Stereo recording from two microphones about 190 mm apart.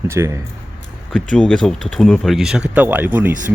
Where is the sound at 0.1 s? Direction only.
15° right (ahead or behind).